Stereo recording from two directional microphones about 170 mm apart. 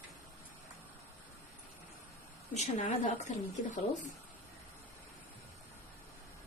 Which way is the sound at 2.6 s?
45° left (ahead or behind).